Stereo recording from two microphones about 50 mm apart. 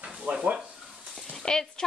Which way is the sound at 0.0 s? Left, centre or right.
Right.